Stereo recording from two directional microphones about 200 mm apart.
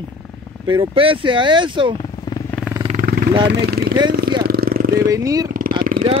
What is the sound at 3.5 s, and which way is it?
Speech, 55° right (ahead or behind).